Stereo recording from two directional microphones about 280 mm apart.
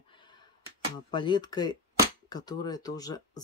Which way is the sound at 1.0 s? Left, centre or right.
Centre.